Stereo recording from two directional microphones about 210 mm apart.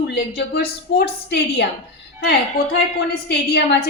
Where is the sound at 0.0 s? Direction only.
50° left (ahead or behind).